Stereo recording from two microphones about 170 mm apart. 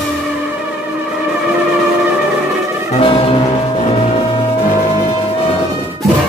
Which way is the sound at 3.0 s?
30° left (ahead or behind).